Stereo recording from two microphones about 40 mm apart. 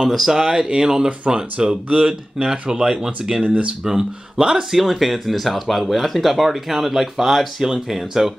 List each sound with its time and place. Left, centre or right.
0.1 s speech: centre
3.4 s speech: right
3.8 s speech: centre
4.7 s speech: centre